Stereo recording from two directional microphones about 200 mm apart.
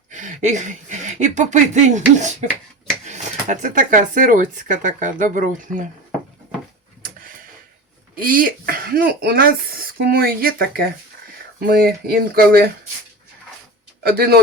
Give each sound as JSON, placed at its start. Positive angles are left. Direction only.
{"t": 0.1, "sound": "speech", "side_deg": -40}
{"t": 7.0, "sound": "tick-tock", "side_deg": -45}
{"t": 8.1, "sound": "speech", "side_deg": -45}
{"t": 14.0, "sound": "speech", "side_deg": -50}